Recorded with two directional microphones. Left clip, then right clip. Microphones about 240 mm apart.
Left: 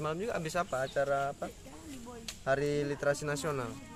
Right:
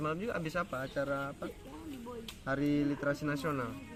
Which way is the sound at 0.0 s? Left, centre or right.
Left.